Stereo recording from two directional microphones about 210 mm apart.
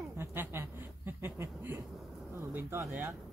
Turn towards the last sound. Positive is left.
turn(degrees=-10)  # may be behind; listen again after turning